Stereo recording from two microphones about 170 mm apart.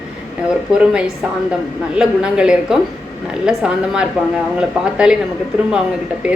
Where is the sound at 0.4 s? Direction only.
5° right (ahead or behind).